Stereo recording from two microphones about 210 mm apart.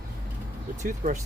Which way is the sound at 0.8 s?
40° right (ahead or behind).